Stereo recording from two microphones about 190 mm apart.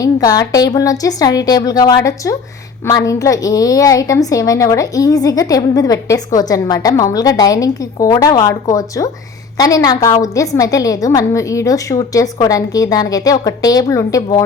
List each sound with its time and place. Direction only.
0.0 s a woman's voice: 20° left (ahead or behind)